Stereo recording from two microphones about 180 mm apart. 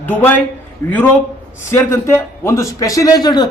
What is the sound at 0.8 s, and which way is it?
A man's voice, 20° left (ahead or behind).